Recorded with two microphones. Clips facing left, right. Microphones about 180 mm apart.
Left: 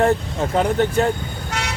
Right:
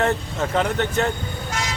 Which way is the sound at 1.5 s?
70° left (ahead or behind).